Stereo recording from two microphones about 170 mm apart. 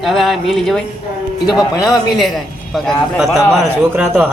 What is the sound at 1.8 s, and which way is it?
A man's voice, centre (ahead or behind).